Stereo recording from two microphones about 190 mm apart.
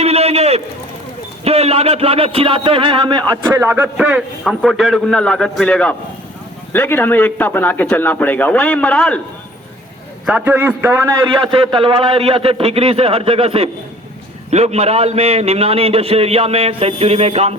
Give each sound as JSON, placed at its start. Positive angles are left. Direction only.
{"t": 0.0, "sound": "a sound", "side_deg": -35}
{"t": 1.5, "sound": "a man's voice", "side_deg": -35}
{"t": 10.2, "sound": "a man's voice", "side_deg": -5}
{"t": 11.5, "sound": "a man's voice", "side_deg": -30}